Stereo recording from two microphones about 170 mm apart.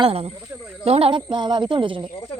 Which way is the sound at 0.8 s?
35° right (ahead or behind).